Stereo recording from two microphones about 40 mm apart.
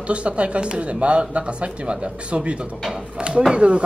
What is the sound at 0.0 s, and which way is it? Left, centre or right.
Speech, right.